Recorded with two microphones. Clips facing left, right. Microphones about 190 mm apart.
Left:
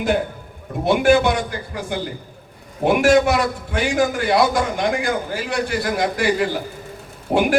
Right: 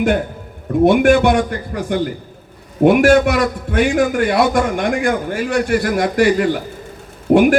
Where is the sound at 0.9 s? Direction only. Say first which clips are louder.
Right 3 dB; 55° right (ahead or behind).